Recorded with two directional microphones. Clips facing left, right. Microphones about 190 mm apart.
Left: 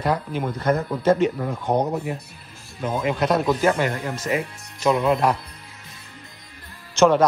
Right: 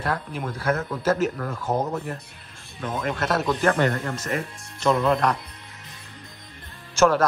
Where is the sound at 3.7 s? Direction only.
15° left (ahead or behind).